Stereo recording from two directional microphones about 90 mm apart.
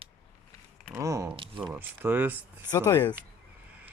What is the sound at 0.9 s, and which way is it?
Speech, 35° right (ahead or behind).